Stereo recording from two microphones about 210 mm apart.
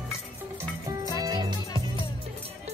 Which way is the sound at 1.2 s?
20° right (ahead or behind).